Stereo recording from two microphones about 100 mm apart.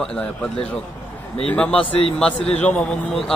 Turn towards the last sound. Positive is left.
turn(degrees=5)  # may be behind; listen again after turning